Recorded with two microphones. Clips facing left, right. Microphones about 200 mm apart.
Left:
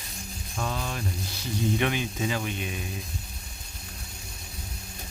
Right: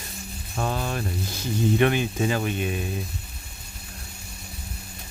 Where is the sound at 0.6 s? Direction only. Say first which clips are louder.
Right 5 dB; 40° right (ahead or behind).